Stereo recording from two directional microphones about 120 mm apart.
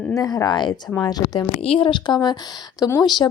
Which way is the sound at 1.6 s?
50° left (ahead or behind).